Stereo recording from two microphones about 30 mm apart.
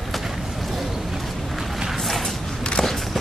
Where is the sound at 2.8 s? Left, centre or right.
Centre.